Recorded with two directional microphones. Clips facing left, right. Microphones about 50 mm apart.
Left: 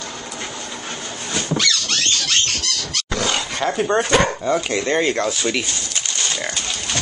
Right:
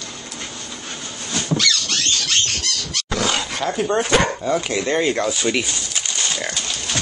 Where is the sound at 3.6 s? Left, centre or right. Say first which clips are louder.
Left 2 dB; centre.